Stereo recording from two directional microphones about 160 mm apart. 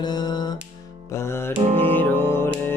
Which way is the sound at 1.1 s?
15° left (ahead or behind).